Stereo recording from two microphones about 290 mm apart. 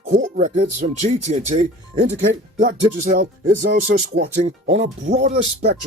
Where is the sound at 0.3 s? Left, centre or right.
Right.